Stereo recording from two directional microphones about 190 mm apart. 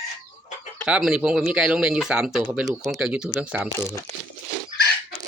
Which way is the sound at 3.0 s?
5° right (ahead or behind).